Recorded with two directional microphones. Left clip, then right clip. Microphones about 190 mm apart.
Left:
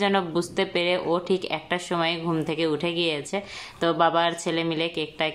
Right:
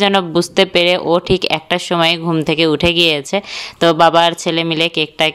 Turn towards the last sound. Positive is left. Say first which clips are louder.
# right 12 dB
turn(degrees=-45)  # may be behind; listen again after turning